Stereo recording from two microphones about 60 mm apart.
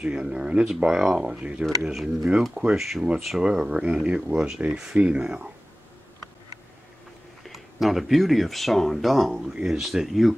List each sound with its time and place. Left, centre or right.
0.0 s speech: centre
1.8 s speech: centre
7.4 s speech: centre